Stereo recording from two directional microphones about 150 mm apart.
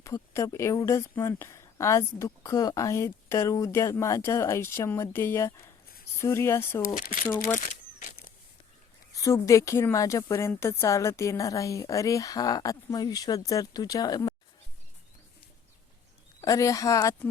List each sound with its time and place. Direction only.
0.0 s speech: 20° left (ahead or behind)
6.8 s speech: 70° left (ahead or behind)
7.3 s speech: 20° left (ahead or behind)
7.6 s a sound: 55° left (ahead or behind)
9.1 s speech: 20° left (ahead or behind)
16.4 s speech: 20° left (ahead or behind)